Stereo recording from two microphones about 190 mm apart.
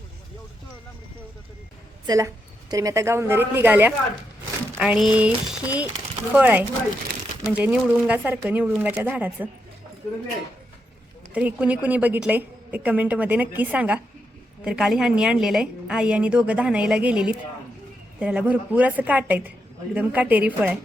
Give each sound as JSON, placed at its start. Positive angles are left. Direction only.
{"t": 2.0, "sound": "a woman's voice", "side_deg": -20}
{"t": 11.3, "sound": "a woman's voice", "side_deg": -5}